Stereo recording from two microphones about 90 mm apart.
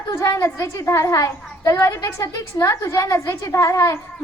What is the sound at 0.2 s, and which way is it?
A woman's voice, 35° left (ahead or behind).